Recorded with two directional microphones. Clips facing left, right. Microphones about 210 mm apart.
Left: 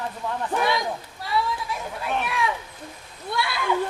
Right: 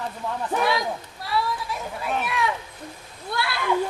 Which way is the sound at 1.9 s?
Centre (ahead or behind).